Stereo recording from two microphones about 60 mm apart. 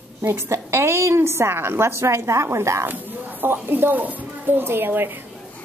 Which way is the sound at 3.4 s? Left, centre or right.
Right.